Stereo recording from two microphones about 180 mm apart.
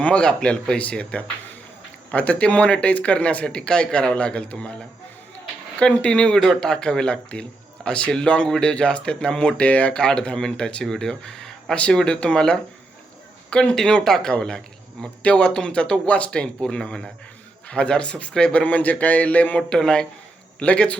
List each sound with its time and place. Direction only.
0.0 s speech: 5° left (ahead or behind)
5.8 s speech: 5° left (ahead or behind)